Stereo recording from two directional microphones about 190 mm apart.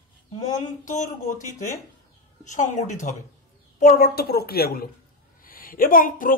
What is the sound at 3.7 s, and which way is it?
A woman's voice, 45° left (ahead or behind).